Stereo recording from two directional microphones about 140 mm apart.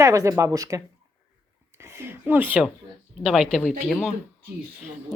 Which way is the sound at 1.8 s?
20° right (ahead or behind).